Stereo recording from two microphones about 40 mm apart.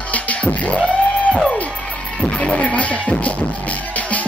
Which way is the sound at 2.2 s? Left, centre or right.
Left.